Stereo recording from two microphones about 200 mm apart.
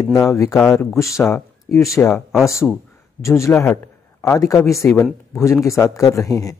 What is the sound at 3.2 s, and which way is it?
A man's voice, 15° left (ahead or behind).